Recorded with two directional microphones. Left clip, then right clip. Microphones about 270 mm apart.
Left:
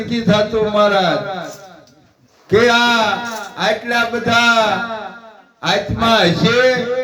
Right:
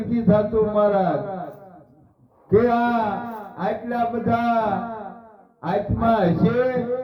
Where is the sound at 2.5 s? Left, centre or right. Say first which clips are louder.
Left 6 dB; left.